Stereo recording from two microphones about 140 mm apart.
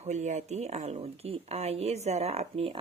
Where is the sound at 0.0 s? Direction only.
55° right (ahead or behind).